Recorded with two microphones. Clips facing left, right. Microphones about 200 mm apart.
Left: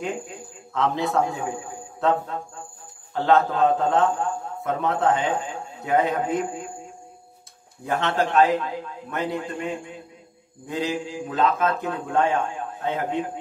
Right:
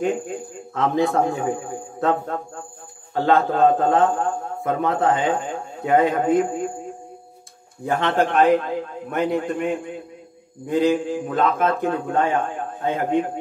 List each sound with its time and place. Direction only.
0.0 s a man's voice: 50° right (ahead or behind)
8.0 s a man's voice: 55° right (ahead or behind)